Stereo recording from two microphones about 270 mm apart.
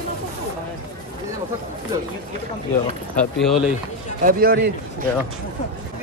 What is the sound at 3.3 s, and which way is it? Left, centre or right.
Speech, centre.